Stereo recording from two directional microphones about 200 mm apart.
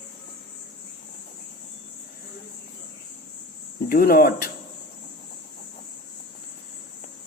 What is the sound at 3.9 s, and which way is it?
Speech, 50° left (ahead or behind).